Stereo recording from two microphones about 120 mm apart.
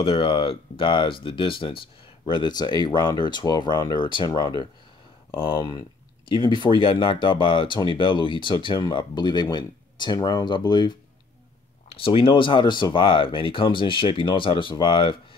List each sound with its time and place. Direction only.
0.0 s speech: 45° left (ahead or behind)
11.9 s speech: 50° left (ahead or behind)